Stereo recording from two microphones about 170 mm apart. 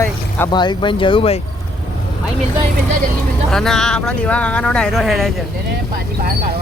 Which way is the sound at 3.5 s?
5° left (ahead or behind).